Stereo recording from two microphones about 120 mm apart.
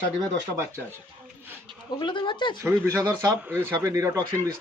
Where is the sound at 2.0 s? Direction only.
40° left (ahead or behind).